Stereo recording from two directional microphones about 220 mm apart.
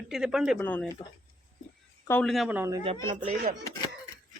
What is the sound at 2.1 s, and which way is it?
Speech, 5° left (ahead or behind).